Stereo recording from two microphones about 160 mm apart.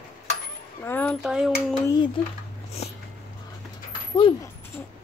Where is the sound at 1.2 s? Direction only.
5° right (ahead or behind).